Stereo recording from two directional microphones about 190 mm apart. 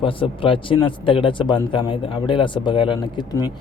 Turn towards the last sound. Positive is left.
turn(degrees=25)  # may be behind; listen again after turning